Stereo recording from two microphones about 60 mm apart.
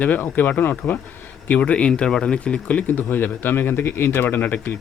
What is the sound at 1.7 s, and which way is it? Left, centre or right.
Speech, centre.